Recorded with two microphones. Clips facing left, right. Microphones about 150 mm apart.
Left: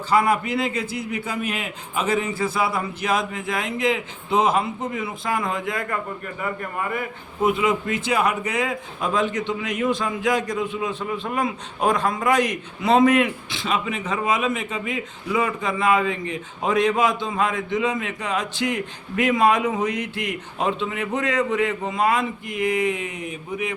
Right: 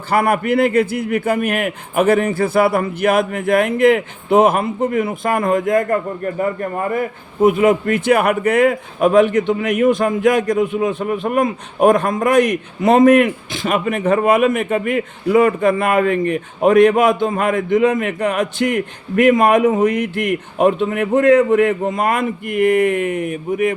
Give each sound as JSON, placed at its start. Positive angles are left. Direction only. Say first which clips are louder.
{"t": 0.1, "sound": "a man's voice", "louder": "right 4 dB", "side_deg": -55}
{"t": 7.4, "sound": "a man's voice", "louder": "right 8 dB", "side_deg": -50}